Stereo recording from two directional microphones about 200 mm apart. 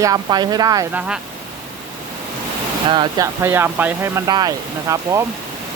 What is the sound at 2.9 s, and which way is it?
Speech, 20° right (ahead or behind).